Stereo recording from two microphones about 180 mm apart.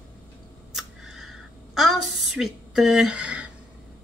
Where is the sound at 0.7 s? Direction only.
Centre (ahead or behind).